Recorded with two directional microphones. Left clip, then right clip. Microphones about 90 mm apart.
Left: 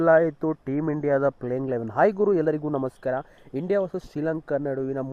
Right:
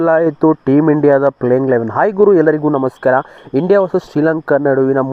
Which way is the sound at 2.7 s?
5° right (ahead or behind).